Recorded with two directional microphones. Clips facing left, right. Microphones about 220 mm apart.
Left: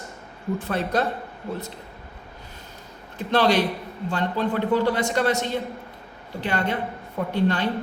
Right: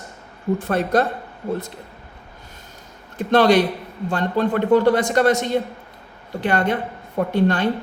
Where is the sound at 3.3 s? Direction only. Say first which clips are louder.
Right 5 dB; 50° right (ahead or behind).